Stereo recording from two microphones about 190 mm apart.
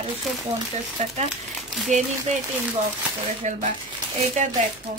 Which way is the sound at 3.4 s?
40° right (ahead or behind).